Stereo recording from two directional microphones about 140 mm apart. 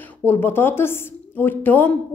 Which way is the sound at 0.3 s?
15° left (ahead or behind).